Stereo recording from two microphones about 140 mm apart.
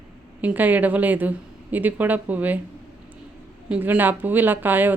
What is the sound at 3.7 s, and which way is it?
Speech, 10° right (ahead or behind).